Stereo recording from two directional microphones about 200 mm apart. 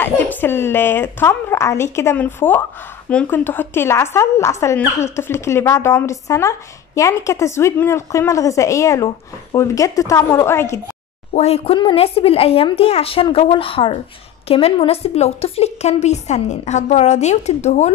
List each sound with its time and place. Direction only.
0.0 s a woman's voice: 10° left (ahead or behind)
11.3 s a woman's voice: 30° left (ahead or behind)